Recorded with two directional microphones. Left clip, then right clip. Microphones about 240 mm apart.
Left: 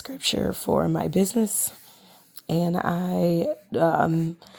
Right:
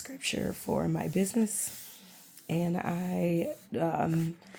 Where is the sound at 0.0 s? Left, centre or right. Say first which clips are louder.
Left 8 dB; left.